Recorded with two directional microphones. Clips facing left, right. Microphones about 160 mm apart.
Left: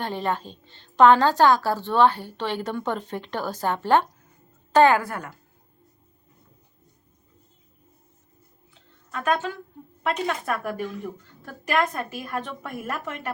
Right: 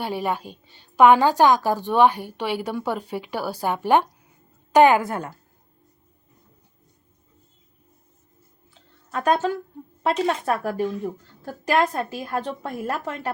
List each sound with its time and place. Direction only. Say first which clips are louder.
0.0 s a woman's voice: right 1 dB; 10° right (ahead or behind)
9.1 s speech: right 4 dB; 35° right (ahead or behind)